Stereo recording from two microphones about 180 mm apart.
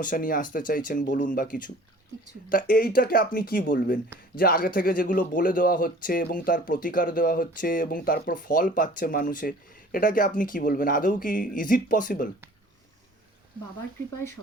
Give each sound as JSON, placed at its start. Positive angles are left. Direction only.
{"t": 0.0, "sound": "speech", "side_deg": 50}